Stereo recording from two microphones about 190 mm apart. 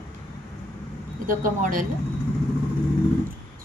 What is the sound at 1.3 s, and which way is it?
Speech, 45° right (ahead or behind).